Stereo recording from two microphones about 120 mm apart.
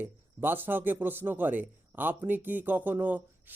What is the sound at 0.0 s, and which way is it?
Speech, 15° right (ahead or behind).